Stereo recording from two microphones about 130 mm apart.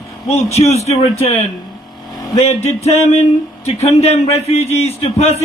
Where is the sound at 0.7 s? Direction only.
55° left (ahead or behind).